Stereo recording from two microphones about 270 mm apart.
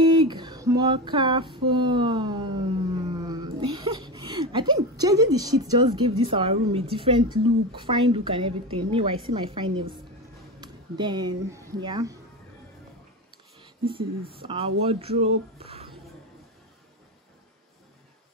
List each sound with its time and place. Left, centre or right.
0.0 s female singing: centre
7.4 s speech: centre
13.6 s a sound: centre
14.3 s speech: centre